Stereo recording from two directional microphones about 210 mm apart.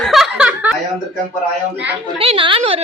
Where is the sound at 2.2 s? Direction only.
25° right (ahead or behind).